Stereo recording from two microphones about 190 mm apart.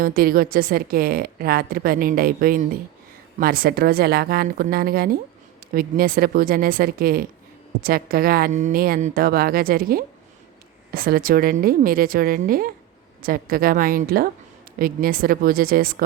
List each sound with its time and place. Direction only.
0.0 s a woman's voice: 50° right (ahead or behind)